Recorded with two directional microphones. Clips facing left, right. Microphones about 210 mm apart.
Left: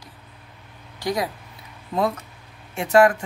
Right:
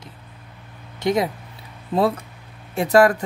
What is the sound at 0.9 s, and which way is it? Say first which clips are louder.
Speech: right 5 dB; 25° right (ahead or behind).